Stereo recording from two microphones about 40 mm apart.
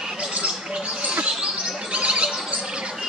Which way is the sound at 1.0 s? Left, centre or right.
Right.